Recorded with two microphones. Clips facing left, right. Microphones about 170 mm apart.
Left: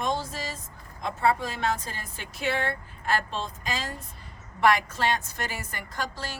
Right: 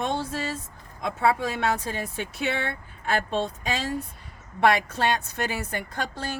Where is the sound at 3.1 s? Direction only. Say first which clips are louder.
Right 3 dB; 65° right (ahead or behind).